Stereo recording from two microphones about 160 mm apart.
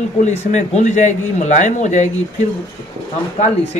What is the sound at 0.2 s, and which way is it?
Speech, 45° left (ahead or behind).